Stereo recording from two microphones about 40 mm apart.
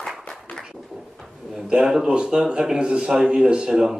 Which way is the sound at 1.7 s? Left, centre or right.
Centre.